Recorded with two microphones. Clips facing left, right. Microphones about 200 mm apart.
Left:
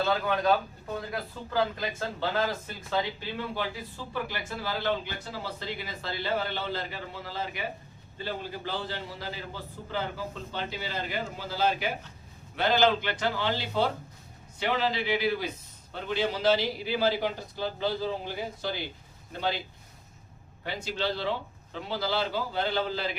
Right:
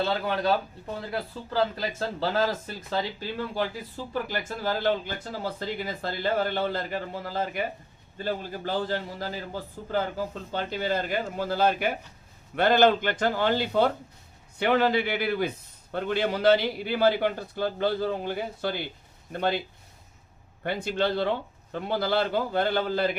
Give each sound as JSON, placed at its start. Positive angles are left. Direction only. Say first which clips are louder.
{"t": 0.0, "sound": "a man's voice", "louder": "even", "side_deg": -30}
{"t": 20.7, "sound": "a man's voice", "louder": "right 5 dB", "side_deg": -55}